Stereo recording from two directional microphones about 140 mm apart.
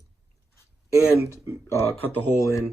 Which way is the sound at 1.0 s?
20° left (ahead or behind).